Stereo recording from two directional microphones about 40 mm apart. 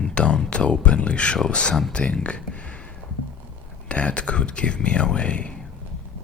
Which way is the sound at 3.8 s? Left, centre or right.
Left.